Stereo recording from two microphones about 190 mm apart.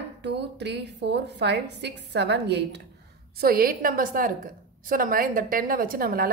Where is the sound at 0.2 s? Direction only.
65° right (ahead or behind).